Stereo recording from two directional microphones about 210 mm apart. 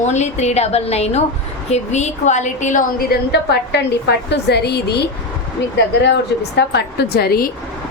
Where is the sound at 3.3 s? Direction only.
55° left (ahead or behind).